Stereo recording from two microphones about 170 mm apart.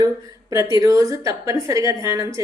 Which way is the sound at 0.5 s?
20° right (ahead or behind).